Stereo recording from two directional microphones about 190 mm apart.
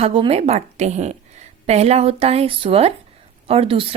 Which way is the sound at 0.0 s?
30° right (ahead or behind).